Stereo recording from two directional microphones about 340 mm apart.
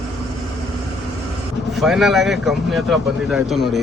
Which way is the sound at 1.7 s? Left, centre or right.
Centre.